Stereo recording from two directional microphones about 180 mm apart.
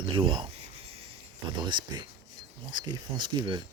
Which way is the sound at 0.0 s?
25° right (ahead or behind).